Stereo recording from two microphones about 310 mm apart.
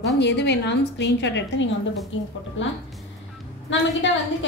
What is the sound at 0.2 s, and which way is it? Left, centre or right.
A woman's voice, left.